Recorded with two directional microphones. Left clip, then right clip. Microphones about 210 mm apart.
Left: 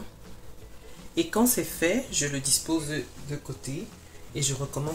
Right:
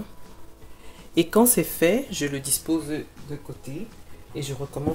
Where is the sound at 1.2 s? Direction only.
55° right (ahead or behind).